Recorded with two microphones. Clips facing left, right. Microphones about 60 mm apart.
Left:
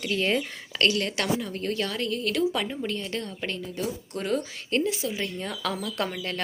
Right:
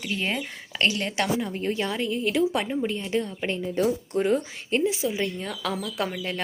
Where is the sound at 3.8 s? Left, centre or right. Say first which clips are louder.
Right 8 dB; right.